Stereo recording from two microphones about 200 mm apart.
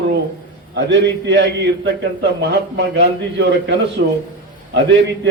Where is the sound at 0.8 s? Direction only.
65° right (ahead or behind).